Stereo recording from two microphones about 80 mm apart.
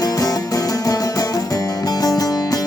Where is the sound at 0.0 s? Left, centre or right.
Left.